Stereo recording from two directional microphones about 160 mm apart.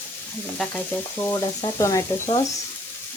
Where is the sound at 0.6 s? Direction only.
5° left (ahead or behind).